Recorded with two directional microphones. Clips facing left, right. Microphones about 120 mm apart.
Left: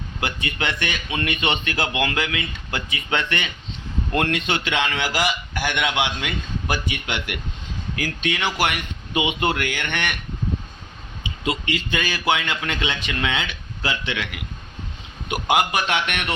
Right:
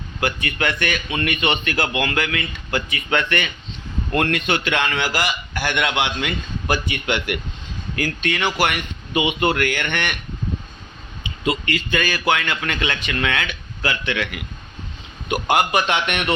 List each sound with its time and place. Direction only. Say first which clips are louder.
0.2 s a man's voice: right 4 dB; 20° left (ahead or behind)
11.2 s a man's voice: right 3 dB; 15° left (ahead or behind)